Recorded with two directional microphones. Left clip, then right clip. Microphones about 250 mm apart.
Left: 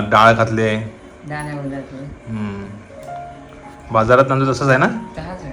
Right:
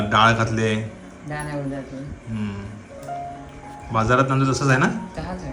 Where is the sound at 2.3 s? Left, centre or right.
Centre.